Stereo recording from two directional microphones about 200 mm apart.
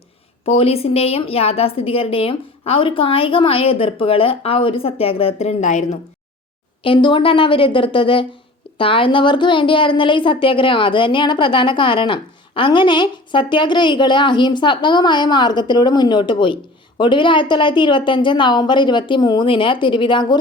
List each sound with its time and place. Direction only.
0.4 s a woman's voice: 30° left (ahead or behind)
6.8 s a woman's voice: 25° left (ahead or behind)